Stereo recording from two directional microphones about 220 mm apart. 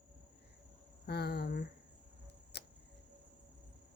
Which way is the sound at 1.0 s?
45° left (ahead or behind).